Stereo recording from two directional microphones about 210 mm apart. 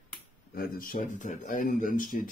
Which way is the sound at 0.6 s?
45° left (ahead or behind).